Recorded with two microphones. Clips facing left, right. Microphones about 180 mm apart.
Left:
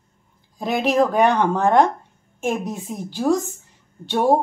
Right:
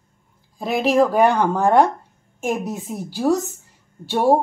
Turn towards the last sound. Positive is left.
turn(degrees=-10)  # may be behind; listen again after turning